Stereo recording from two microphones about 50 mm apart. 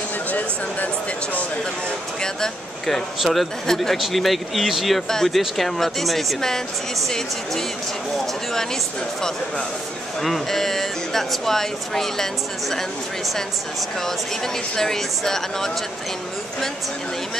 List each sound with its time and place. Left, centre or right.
0.3 s a sound: left
2.2 s speech: centre
3.2 s speech: centre
5.1 s speech: centre
10.2 s speech: centre
14.8 s speech: centre